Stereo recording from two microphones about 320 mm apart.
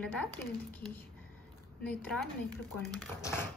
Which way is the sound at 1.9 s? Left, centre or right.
Centre.